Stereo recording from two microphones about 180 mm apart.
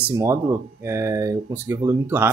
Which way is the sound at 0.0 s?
15° right (ahead or behind).